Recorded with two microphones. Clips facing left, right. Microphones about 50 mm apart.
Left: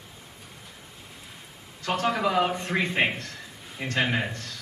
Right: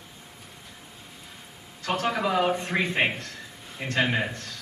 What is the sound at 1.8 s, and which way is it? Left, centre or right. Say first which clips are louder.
Speech: left 1 dB; centre.